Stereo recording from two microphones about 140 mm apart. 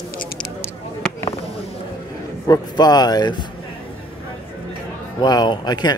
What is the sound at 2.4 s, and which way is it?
Speech, 30° left (ahead or behind).